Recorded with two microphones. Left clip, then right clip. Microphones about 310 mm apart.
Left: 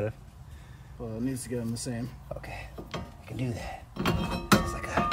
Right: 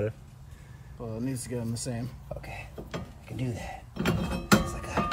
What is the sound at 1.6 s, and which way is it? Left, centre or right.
Speech, centre.